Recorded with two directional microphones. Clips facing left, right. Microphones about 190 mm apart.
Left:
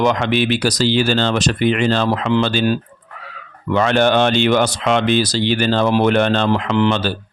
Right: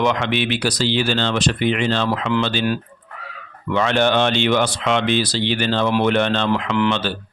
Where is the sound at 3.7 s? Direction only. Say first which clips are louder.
Left 3 dB; 45° left (ahead or behind).